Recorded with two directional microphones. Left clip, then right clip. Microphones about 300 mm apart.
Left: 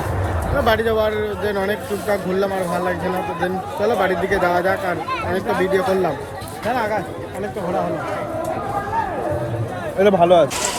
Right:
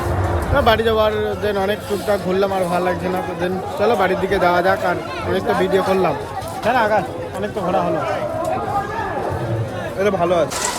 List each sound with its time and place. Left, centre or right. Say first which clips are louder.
0.6 s speech: right 2 dB; centre
10.0 s speech: left 4 dB; left